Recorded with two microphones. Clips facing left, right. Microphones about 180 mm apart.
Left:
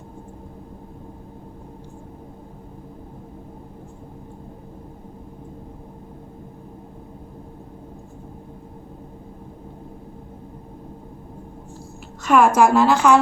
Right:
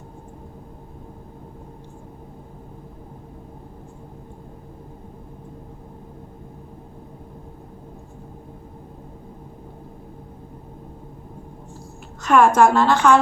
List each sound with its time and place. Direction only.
12.2 s a woman's voice: 5° left (ahead or behind)